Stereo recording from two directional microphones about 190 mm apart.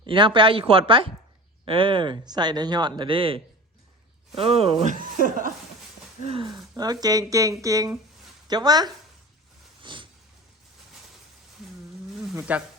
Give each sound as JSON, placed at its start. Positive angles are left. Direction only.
{"t": 0.0, "sound": "speech", "side_deg": -25}
{"t": 4.9, "sound": "speech", "side_deg": -45}
{"t": 6.2, "sound": "speech", "side_deg": -25}
{"t": 9.8, "sound": "a sound", "side_deg": -25}
{"t": 12.3, "sound": "speech", "side_deg": -10}